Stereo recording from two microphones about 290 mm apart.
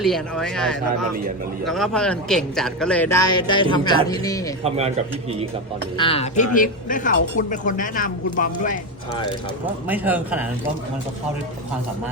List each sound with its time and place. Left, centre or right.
0.0 s a man's voice: centre
4.6 s a man's voice: right
6.0 s speech: centre
9.9 s a man's voice: centre